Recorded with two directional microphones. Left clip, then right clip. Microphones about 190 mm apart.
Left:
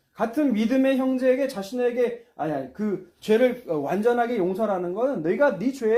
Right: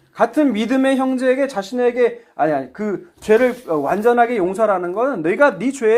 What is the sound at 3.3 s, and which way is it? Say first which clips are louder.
A man's voice: right 6 dB; 15° right (ahead or behind).